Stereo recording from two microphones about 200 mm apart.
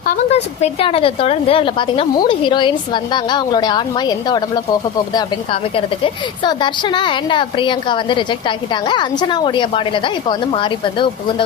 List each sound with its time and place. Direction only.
0.0 s a woman's voice: 40° left (ahead or behind)